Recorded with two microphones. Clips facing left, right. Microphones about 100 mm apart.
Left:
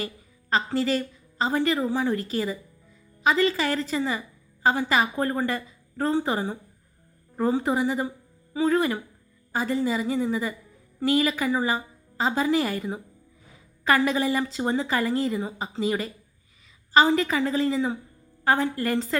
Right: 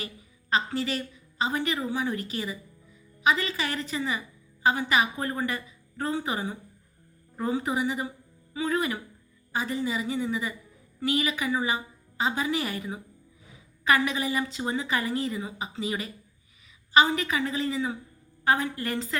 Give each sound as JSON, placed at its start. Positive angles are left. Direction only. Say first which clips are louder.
{"t": 0.5, "sound": "a woman's voice", "louder": "left 4 dB", "side_deg": 35}